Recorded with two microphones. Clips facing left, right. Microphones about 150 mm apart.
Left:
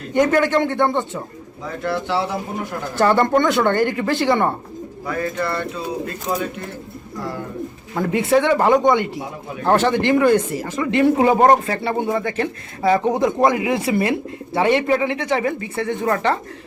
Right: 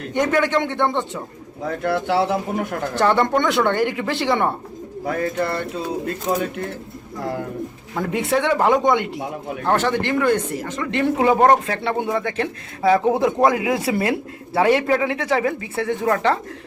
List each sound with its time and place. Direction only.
0.1 s speech: 5° left (ahead or behind)
1.6 s speech: 55° right (ahead or behind)
2.9 s speech: 5° left (ahead or behind)
7.9 s speech: centre (ahead or behind)
9.6 s speech: 10° left (ahead or behind)